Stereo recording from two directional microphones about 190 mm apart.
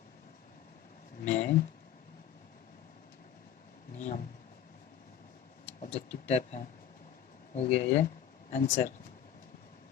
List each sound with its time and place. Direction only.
1.2 s speech: 40° left (ahead or behind)
5.8 s speech: 35° left (ahead or behind)